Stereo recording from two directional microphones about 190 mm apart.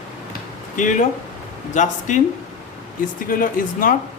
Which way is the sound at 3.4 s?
45° left (ahead or behind).